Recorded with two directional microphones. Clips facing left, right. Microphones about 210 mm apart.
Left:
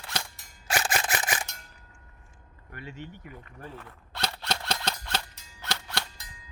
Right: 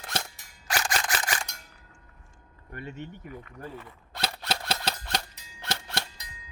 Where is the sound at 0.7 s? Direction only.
20° left (ahead or behind).